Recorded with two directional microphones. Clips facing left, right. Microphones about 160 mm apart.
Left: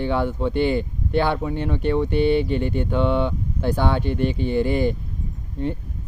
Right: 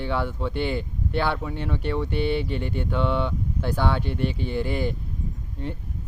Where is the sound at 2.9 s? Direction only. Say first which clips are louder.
Left 3 dB; 15° left (ahead or behind).